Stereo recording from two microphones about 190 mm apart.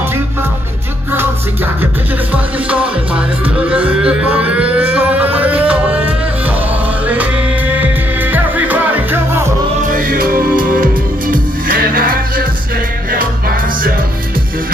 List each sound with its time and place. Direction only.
2.3 s music: 5° right (ahead or behind)
9.8 s music: 50° right (ahead or behind)